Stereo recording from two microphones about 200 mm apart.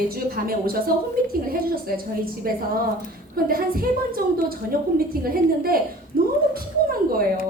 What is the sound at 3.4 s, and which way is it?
A woman's voice, 45° right (ahead or behind).